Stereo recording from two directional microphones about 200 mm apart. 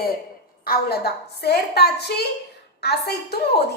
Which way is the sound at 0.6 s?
50° left (ahead or behind).